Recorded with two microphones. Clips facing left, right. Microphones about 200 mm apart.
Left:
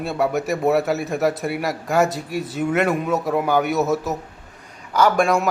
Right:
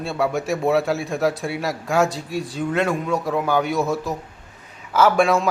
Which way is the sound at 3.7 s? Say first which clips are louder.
Left 2 dB; 20° left (ahead or behind).